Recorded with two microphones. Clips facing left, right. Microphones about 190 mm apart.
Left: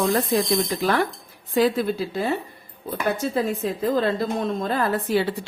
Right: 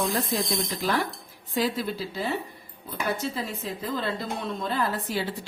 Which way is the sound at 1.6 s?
55° left (ahead or behind).